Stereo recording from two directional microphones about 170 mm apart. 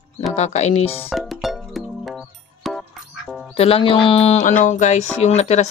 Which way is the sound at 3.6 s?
35° left (ahead or behind).